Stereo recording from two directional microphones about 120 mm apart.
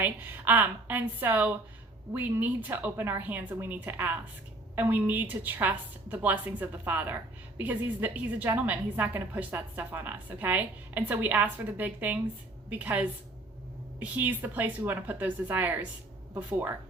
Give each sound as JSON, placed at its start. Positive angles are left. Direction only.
{"t": 0.0, "sound": "a woman's voice", "side_deg": -15}